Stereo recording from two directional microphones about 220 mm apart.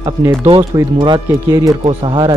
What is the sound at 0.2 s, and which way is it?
Speech, 15° right (ahead or behind).